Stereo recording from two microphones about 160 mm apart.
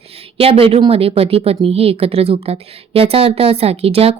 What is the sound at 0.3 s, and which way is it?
A woman's voice, 35° right (ahead or behind).